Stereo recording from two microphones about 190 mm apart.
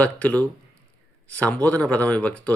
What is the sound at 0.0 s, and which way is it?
Speech, 10° left (ahead or behind).